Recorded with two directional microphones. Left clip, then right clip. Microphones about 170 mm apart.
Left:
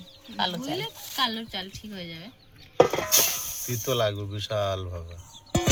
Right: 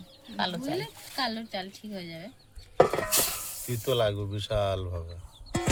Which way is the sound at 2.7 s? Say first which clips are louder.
Left 2 dB; 50° left (ahead or behind).